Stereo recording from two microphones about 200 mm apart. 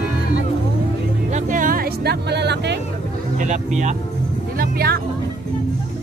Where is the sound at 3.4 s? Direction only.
35° right (ahead or behind).